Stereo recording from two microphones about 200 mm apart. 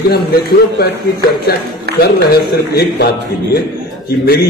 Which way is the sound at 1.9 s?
55° right (ahead or behind).